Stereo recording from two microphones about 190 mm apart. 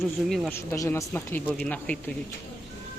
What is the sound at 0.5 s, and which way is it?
Speech, 15° left (ahead or behind).